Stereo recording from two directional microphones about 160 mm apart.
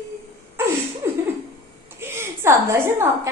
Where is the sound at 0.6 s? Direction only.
15° right (ahead or behind).